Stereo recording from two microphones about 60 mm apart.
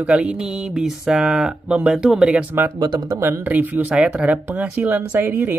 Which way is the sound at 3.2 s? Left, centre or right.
Right.